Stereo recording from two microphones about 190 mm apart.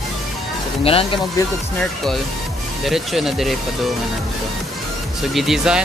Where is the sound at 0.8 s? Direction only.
30° left (ahead or behind).